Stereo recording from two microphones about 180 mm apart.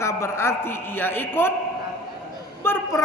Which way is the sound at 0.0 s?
15° left (ahead or behind).